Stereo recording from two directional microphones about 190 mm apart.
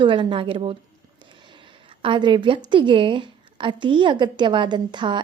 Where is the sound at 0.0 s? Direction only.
25° right (ahead or behind).